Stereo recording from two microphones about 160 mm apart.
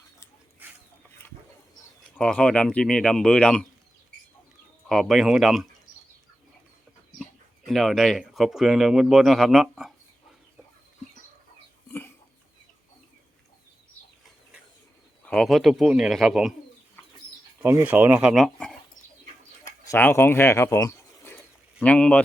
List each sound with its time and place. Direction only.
0.6 s a sound: 10° right (ahead or behind)
2.1 s speech: 5° left (ahead or behind)
4.9 s speech: centre (ahead or behind)
7.2 s speech: centre (ahead or behind)
11.9 s a sound: 15° left (ahead or behind)
15.2 s speech: 5° left (ahead or behind)
17.6 s speech: 15° right (ahead or behind)
19.6 s speech: 15° left (ahead or behind)
21.8 s speech: 5° left (ahead or behind)